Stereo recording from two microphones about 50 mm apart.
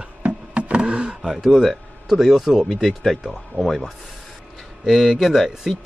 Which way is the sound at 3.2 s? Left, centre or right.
Centre.